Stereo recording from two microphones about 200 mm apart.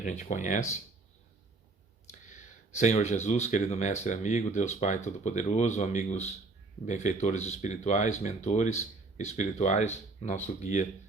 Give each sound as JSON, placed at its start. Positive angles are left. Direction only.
{"t": 0.0, "sound": "speech", "side_deg": 35}
{"t": 2.0, "sound": "a sound", "side_deg": 40}
{"t": 3.2, "sound": "speech", "side_deg": 35}